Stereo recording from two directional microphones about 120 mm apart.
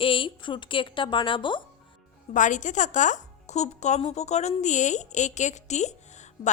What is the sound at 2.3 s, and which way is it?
Speech, 90° left.